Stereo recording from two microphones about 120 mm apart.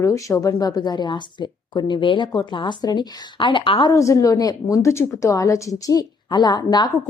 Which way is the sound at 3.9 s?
25° left (ahead or behind).